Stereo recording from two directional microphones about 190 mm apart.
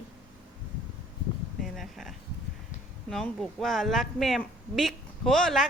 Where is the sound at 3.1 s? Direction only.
Centre (ahead or behind).